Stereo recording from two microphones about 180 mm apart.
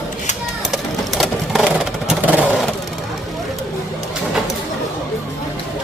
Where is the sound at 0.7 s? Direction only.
Centre (ahead or behind).